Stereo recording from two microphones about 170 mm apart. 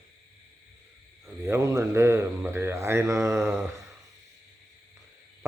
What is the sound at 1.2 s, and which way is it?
Speech, 15° right (ahead or behind).